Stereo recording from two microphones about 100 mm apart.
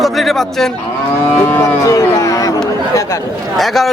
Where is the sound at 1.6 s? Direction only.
35° left (ahead or behind).